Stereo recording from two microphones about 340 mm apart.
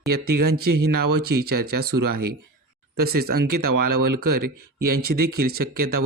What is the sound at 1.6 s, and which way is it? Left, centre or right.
Speech, right.